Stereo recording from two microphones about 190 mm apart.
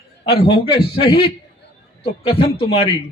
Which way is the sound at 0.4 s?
25° left (ahead or behind).